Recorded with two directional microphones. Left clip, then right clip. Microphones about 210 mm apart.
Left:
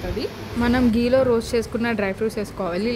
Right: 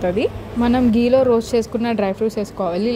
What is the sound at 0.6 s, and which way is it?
Speech, 10° right (ahead or behind).